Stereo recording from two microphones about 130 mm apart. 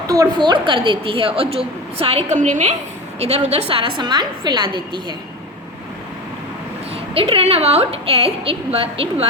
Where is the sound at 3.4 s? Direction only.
50° right (ahead or behind).